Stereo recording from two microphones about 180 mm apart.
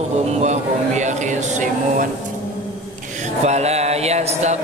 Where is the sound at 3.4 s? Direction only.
35° right (ahead or behind).